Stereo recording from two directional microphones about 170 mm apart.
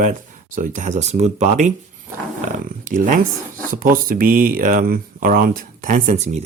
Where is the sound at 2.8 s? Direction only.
50° right (ahead or behind).